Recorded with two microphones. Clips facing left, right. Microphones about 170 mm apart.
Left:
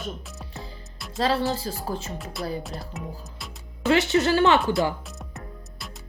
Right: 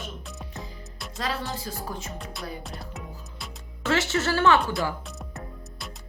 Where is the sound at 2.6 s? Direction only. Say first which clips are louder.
Left 3 dB; centre (ahead or behind).